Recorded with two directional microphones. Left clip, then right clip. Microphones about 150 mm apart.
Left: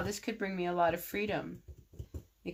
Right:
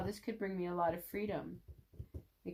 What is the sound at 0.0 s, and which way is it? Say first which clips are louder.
Speech: left 5 dB; 25° left (ahead or behind).